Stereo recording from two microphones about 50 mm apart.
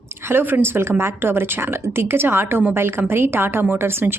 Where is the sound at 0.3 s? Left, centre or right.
Right.